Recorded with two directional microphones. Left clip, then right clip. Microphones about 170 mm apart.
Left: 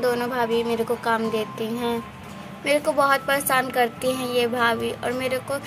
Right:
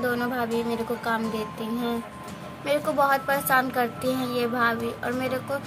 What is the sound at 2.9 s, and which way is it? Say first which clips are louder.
A woman's voice: left 2 dB; 30° left (ahead or behind).